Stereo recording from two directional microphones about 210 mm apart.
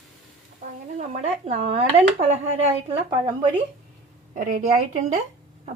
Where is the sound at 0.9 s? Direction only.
35° right (ahead or behind).